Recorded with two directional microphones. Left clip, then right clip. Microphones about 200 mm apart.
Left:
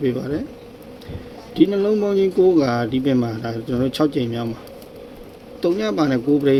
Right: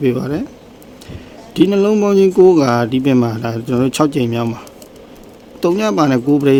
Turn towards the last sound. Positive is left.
turn(degrees=-35)  # may be behind; listen again after turning